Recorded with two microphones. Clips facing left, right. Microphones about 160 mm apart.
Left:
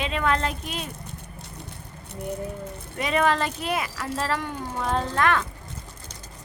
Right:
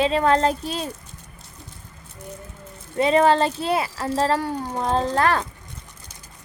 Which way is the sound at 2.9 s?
30° right (ahead or behind).